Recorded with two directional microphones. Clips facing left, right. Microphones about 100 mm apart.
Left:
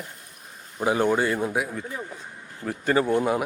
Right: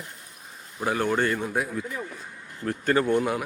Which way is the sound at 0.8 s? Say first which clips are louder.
Left 3 dB; 15° left (ahead or behind).